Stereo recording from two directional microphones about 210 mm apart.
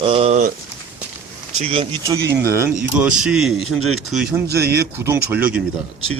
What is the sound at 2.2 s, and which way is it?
Speech, 15° right (ahead or behind).